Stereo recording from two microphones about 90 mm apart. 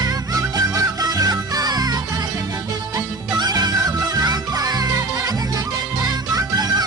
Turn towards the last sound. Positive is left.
turn(degrees=-45)  # may be behind; listen again after turning